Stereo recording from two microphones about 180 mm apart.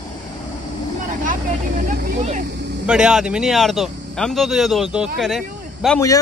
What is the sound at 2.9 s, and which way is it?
Speech, 5° right (ahead or behind).